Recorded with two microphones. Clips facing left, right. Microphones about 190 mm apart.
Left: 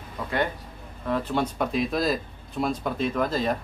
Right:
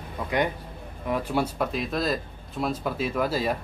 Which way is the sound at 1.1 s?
10° right (ahead or behind).